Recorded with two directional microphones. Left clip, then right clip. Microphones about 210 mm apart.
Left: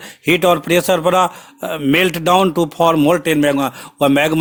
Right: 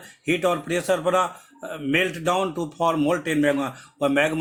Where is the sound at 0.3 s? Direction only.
50° left (ahead or behind).